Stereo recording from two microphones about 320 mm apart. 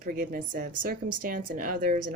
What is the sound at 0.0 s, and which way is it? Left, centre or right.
Speech, right.